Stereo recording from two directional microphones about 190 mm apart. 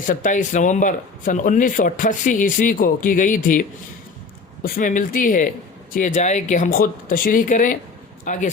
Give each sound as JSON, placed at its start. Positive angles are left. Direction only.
{"t": 0.1, "sound": "a man's voice", "side_deg": 45}